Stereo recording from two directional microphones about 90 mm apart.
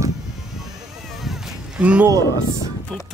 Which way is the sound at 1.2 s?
5° right (ahead or behind).